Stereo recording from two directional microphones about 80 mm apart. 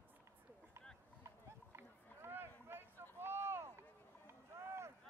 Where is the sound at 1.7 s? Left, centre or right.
Right.